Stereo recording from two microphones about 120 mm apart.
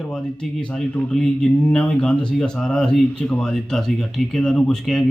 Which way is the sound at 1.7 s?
5° left (ahead or behind).